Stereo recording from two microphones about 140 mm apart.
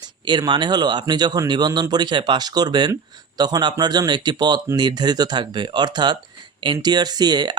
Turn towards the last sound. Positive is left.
turn(degrees=-30)  # may be behind; listen again after turning